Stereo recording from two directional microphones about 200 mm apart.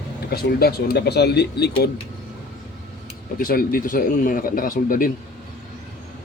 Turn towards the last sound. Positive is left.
turn(degrees=45)  # may be behind; listen again after turning